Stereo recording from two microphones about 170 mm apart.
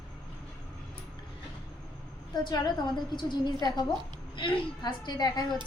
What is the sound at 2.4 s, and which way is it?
A woman's voice, 25° left (ahead or behind).